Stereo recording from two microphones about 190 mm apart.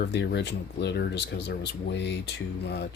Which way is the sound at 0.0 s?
60° left (ahead or behind).